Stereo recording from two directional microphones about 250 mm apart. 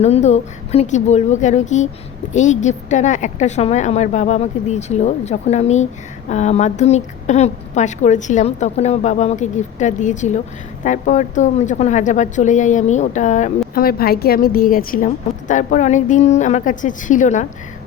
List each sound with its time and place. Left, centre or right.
0.0 s a woman's voice: left